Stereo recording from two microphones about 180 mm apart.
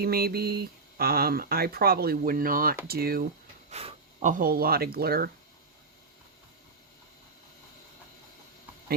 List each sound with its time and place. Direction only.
0.0 s speech: 60° right (ahead or behind)
3.7 s speech: 35° right (ahead or behind); by 5.3 s 60° right (ahead or behind)